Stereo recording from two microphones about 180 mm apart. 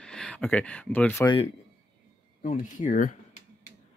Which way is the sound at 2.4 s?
45° left (ahead or behind).